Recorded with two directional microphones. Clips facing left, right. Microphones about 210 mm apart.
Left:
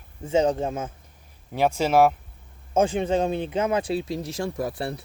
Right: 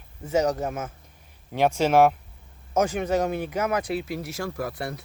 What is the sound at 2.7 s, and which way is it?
Speech, 30° left (ahead or behind).